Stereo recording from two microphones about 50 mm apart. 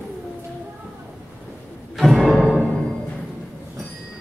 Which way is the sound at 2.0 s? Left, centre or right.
Centre.